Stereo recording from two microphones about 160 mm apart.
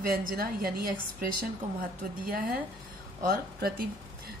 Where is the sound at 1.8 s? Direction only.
65° right (ahead or behind).